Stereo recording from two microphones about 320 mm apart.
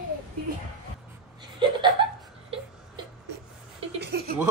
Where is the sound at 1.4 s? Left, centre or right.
Centre.